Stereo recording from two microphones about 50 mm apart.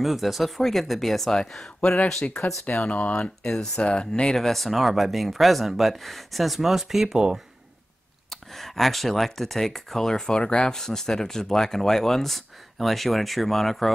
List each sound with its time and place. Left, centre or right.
0.0 s speech: centre
2.6 s speech: left
3.4 s speech: centre
3.8 s speech: left; by 7.2 s centre
8.3 s speech: centre